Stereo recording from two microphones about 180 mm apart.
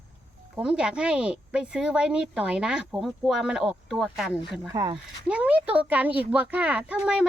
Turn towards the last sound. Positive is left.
turn(degrees=-5)  # may be behind; listen again after turning